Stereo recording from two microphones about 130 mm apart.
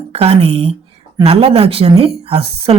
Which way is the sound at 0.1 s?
55° right (ahead or behind).